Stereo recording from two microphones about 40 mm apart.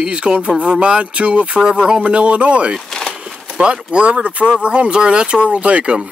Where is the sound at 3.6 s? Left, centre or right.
Right.